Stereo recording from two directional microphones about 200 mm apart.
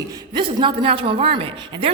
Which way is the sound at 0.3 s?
25° right (ahead or behind).